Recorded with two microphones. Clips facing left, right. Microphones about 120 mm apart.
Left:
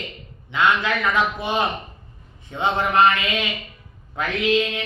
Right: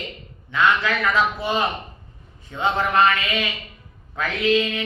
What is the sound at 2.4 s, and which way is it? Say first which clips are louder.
Speech: even; 20° left (ahead or behind).